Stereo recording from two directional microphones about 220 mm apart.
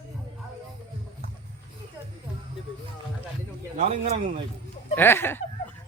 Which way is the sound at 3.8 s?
30° right (ahead or behind).